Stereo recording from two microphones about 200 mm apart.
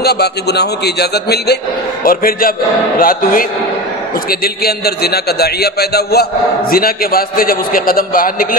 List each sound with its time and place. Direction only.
0.0 s a man's voice: 55° left (ahead or behind)